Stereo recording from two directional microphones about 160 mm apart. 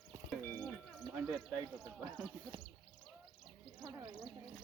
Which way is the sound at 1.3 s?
Centre (ahead or behind).